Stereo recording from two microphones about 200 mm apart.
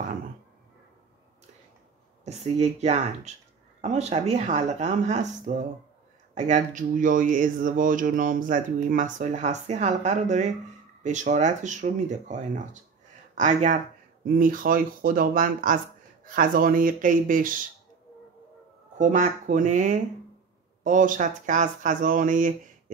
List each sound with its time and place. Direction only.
2.2 s speech: 35° right (ahead or behind)
18.9 s speech: 35° right (ahead or behind)